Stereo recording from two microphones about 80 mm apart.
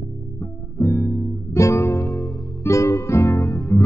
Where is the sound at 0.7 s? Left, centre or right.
Left.